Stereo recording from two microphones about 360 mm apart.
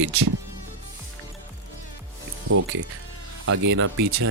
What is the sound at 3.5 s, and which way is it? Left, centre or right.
Speech, right.